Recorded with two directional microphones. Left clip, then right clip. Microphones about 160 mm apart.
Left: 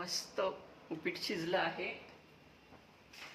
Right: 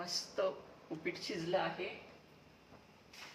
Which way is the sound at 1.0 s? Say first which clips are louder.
Left 2 dB; 30° left (ahead or behind).